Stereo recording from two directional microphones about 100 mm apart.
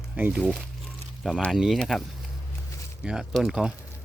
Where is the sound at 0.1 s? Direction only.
15° right (ahead or behind).